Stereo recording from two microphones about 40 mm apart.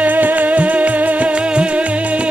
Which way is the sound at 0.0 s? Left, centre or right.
Right.